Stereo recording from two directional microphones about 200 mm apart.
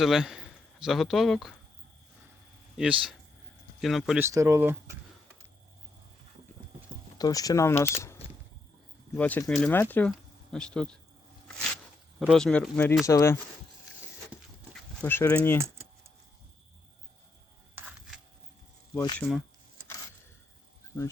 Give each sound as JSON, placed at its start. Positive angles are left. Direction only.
{"t": 0.0, "sound": "a man's voice", "side_deg": 0}
{"t": 2.7, "sound": "speech", "side_deg": -5}
{"t": 4.3, "sound": "speech", "side_deg": -15}
{"t": 7.2, "sound": "speech", "side_deg": 20}
{"t": 7.8, "sound": "speech", "side_deg": 30}
{"t": 9.1, "sound": "speech", "side_deg": 10}
{"t": 12.2, "sound": "speech", "side_deg": 0}
{"t": 14.7, "sound": "speech", "side_deg": 10}
{"t": 17.7, "sound": "a sound", "side_deg": -5}
{"t": 19.2, "sound": "speech", "side_deg": 10}